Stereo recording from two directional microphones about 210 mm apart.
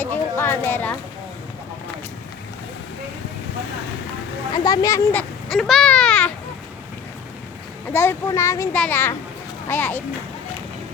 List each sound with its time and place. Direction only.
0.0 s a sound: 10° left (ahead or behind)
4.5 s a child's voice: 20° left (ahead or behind)
5.5 s speech: centre (ahead or behind)
7.9 s a child's voice: 10° left (ahead or behind)